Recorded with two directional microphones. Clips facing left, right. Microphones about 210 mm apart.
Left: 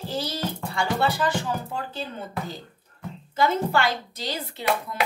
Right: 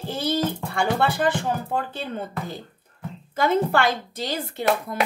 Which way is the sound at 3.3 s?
55° right (ahead or behind).